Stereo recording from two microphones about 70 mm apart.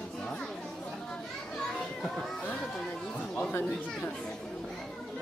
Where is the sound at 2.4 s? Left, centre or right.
Centre.